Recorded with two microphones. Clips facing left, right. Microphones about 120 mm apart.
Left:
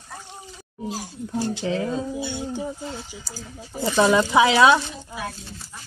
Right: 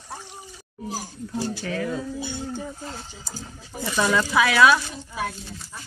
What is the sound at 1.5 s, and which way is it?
Speech, 20° left (ahead or behind).